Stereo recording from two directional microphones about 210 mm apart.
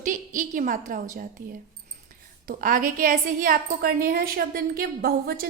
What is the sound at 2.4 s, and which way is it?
A woman's voice, 40° right (ahead or behind).